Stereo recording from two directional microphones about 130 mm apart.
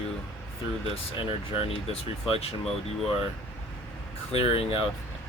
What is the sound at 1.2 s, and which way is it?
Speech, 45° left (ahead or behind).